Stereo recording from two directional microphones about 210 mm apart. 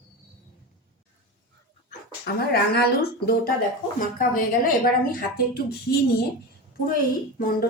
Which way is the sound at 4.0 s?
40° left (ahead or behind).